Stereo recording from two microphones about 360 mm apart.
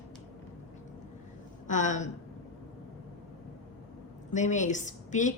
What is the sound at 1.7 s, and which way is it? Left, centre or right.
Speech, left.